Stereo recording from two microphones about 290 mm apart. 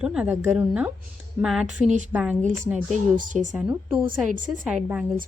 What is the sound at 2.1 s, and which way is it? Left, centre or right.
Speech, centre.